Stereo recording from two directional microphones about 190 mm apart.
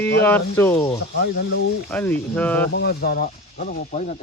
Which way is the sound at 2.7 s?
60° left (ahead or behind).